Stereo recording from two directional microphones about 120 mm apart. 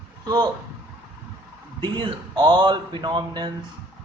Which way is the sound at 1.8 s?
45° right (ahead or behind).